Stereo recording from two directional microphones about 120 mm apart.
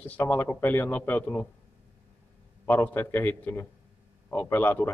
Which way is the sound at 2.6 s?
15° left (ahead or behind).